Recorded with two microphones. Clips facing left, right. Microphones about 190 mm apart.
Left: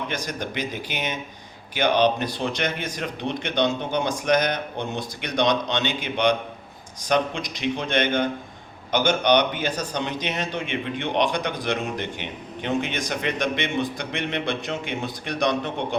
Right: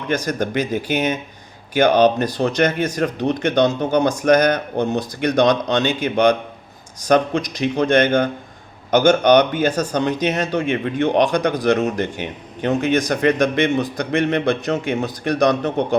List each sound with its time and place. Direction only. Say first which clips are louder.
0.1 s speech: right 9 dB; 45° right (ahead or behind)